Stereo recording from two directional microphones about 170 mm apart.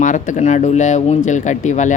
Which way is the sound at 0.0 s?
50° left (ahead or behind).